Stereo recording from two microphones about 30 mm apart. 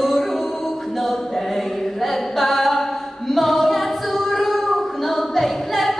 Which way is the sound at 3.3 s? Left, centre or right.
Centre.